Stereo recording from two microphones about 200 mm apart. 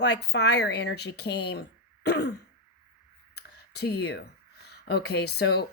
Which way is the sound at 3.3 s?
55° left (ahead or behind).